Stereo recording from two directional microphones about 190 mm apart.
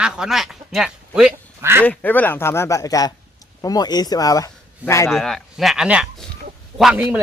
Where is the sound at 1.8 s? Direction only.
10° left (ahead or behind).